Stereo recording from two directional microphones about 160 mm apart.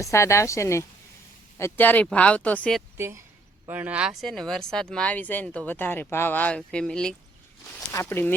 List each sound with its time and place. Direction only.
0.0 s speech: 15° left (ahead or behind)
3.7 s speech: 10° right (ahead or behind)
7.9 s speech: 15° left (ahead or behind)